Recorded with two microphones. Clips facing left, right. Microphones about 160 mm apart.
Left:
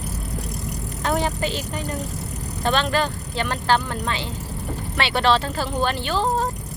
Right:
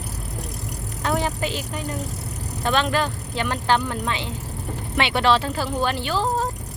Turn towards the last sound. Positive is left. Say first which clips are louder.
# even
turn(degrees=-10)  # may be behind; listen again after turning